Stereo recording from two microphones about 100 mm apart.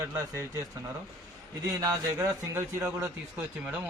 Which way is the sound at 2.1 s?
25° right (ahead or behind).